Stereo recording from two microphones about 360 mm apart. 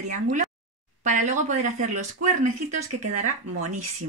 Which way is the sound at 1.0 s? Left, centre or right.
Right.